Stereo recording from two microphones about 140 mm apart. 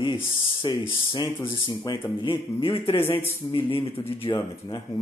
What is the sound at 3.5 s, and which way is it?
Speech, 40° left (ahead or behind).